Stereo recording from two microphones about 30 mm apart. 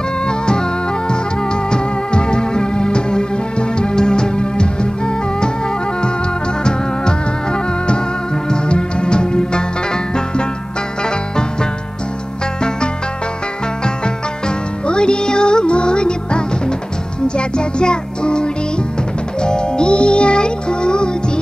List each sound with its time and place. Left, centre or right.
0.3 s music: left
6.6 s music: left
14.9 s music: left